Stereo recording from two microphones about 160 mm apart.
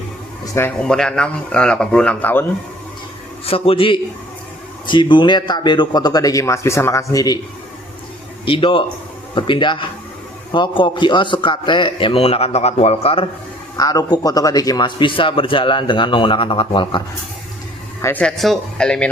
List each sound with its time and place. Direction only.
0.5 s a man's voice: 10° left (ahead or behind)
3.4 s a man's voice: 35° left (ahead or behind)
8.4 s a man's voice: 35° left (ahead or behind)
13.7 s a man's voice: 25° left (ahead or behind)
18.0 s a man's voice: 10° left (ahead or behind)